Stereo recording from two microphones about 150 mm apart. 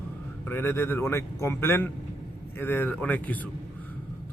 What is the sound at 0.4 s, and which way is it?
A man's voice, 15° left (ahead or behind).